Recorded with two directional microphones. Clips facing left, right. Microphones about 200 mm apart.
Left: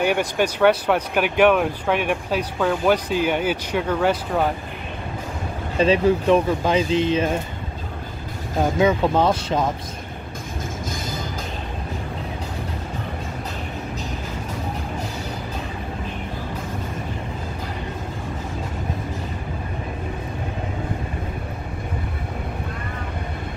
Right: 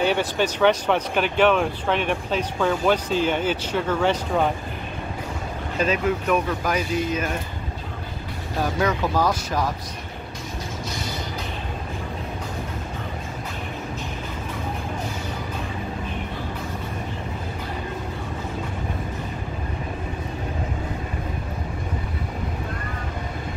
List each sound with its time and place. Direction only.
0.0 s speech: 10° left (ahead or behind)
5.8 s speech: 30° left (ahead or behind)
8.5 s speech: 20° left (ahead or behind)